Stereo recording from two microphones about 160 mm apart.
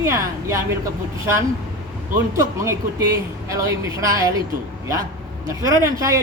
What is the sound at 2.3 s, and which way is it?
Speech, 20° right (ahead or behind).